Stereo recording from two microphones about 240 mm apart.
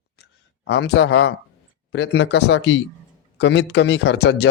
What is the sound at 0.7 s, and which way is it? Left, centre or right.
Speech, left.